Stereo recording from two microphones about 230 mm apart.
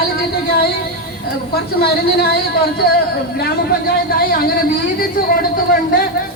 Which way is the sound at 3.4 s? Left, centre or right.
Left.